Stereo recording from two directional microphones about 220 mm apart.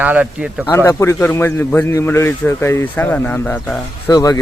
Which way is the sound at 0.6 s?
10° left (ahead or behind).